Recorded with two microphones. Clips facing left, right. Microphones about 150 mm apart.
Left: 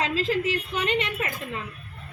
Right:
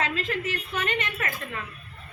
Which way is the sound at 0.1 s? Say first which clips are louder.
Left 5 dB; 30° left (ahead or behind).